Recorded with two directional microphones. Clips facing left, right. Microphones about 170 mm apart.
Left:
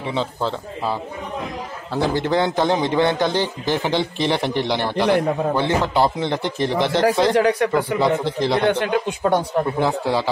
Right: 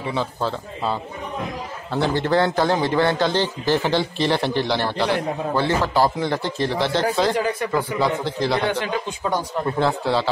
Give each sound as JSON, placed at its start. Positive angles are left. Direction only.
{"t": 0.0, "sound": "a man's voice", "side_deg": 20}
{"t": 2.0, "sound": "a man's voice", "side_deg": 10}
{"t": 7.3, "sound": "speech", "side_deg": 75}
{"t": 7.7, "sound": "speech", "side_deg": 20}
{"t": 8.6, "sound": "speech", "side_deg": 55}
{"t": 9.8, "sound": "a man's voice", "side_deg": 15}